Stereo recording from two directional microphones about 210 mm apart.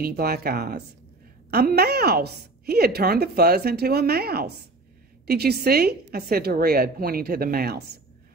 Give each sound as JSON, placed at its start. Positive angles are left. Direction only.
{"t": 0.0, "sound": "a woman's voice", "side_deg": -45}